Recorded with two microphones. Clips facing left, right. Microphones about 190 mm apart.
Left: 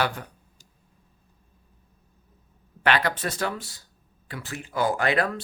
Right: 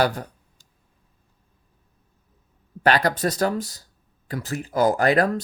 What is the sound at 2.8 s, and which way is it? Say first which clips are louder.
Speech: right 4 dB; 40° right (ahead or behind).